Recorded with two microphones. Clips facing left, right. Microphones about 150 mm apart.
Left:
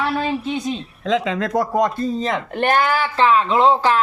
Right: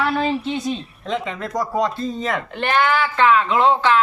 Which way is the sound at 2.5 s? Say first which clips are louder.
Left 1 dB; 45° left (ahead or behind).